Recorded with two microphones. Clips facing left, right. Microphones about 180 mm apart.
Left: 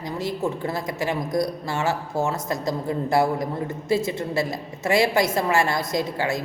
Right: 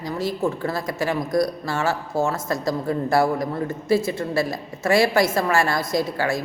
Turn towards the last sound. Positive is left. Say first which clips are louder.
# right 2 dB
turn(degrees=20)  # may be behind; listen again after turning